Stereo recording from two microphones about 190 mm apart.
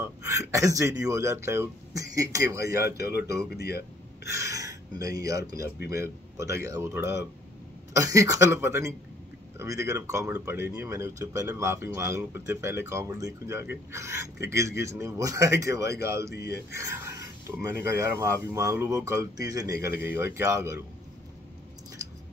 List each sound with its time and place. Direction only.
0.0 s speech: 15° right (ahead or behind)
16.3 s speech: 60° left (ahead or behind)
16.7 s speech: 15° right (ahead or behind)